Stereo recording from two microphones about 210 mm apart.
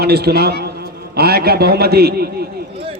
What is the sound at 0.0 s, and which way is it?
A man's voice, 50° right (ahead or behind).